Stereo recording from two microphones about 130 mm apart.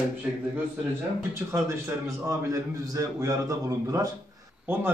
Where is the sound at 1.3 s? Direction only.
20° right (ahead or behind).